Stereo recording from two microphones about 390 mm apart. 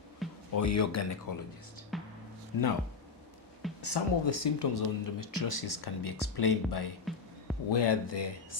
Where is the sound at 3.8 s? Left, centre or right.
Left.